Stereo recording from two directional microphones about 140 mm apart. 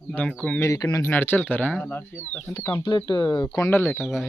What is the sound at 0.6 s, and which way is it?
Speech, 25° left (ahead or behind).